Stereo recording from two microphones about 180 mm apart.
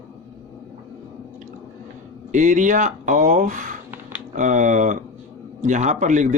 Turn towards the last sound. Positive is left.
turn(degrees=-45)  # may be behind; listen again after turning